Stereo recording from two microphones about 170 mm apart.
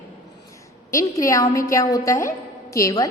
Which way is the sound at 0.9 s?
20° left (ahead or behind).